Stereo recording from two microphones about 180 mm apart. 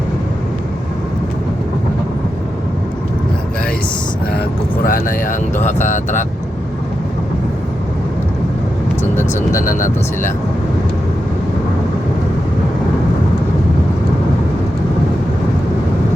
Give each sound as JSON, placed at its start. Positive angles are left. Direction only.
{"t": 4.9, "sound": "speech", "side_deg": 50}
{"t": 9.5, "sound": "speech", "side_deg": 50}